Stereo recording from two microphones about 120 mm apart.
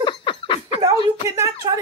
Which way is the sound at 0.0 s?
40° left (ahead or behind).